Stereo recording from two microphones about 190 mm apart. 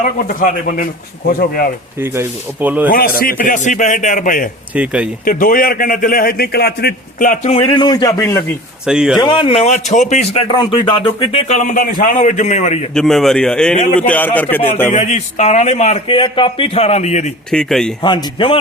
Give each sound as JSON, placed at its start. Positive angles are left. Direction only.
{"t": 0.3, "sound": "a man's voice", "side_deg": 45}
{"t": 2.0, "sound": "speech", "side_deg": -10}
{"t": 3.2, "sound": "a man's voice", "side_deg": 50}
{"t": 4.7, "sound": "speech", "side_deg": -5}
{"t": 5.2, "sound": "a man's voice", "side_deg": 50}
{"t": 7.5, "sound": "a man's voice", "side_deg": 30}
{"t": 8.9, "sound": "a man's voice", "side_deg": -5}
{"t": 9.2, "sound": "speech", "side_deg": 25}
{"t": 10.5, "sound": "speech", "side_deg": 25}
{"t": 12.9, "sound": "a man's voice", "side_deg": 0}
{"t": 14.9, "sound": "speech", "side_deg": 35}
{"t": 17.5, "sound": "a man's voice", "side_deg": 5}
{"t": 18.0, "sound": "a man's voice", "side_deg": 25}